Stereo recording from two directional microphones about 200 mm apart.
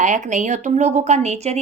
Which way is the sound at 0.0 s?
40° right (ahead or behind).